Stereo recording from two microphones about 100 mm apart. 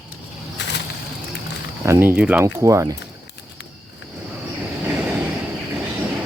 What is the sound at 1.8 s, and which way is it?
Speech, 25° right (ahead or behind).